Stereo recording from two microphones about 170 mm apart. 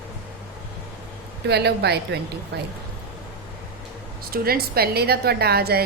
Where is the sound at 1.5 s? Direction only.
75° right (ahead or behind).